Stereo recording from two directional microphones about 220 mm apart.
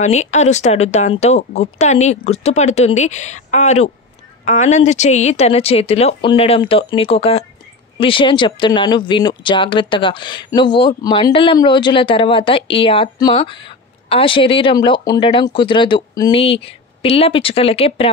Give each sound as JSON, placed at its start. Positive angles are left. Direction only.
{"t": 0.0, "sound": "speech", "side_deg": 30}